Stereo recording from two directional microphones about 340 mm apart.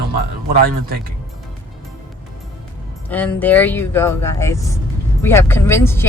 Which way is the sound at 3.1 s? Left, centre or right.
Centre.